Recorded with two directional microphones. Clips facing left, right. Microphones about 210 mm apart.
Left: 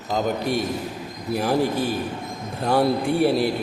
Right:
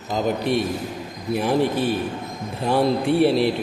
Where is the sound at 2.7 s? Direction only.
Centre (ahead or behind).